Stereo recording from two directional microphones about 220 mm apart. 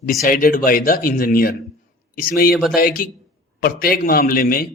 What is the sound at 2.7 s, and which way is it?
A man's voice, 40° left (ahead or behind).